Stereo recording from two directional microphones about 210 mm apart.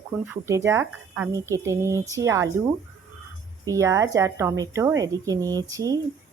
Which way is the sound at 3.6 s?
15° right (ahead or behind).